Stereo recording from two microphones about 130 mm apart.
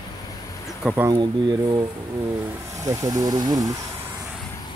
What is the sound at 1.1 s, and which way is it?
Speech, 35° right (ahead or behind).